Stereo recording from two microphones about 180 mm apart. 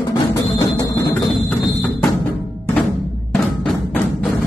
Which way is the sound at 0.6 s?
15° left (ahead or behind).